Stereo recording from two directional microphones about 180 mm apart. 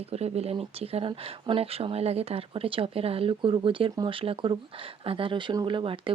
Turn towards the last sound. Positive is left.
turn(degrees=-30)  # may be behind; listen again after turning